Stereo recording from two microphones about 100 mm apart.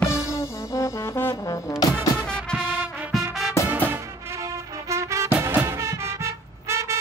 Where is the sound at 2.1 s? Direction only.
10° left (ahead or behind).